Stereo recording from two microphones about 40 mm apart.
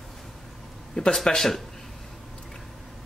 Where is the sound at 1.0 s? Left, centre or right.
Centre.